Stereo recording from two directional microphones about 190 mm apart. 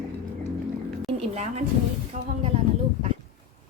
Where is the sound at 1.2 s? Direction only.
35° right (ahead or behind).